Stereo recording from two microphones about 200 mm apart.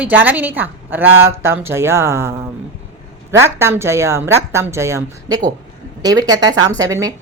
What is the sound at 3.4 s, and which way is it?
A woman's voice, 10° right (ahead or behind).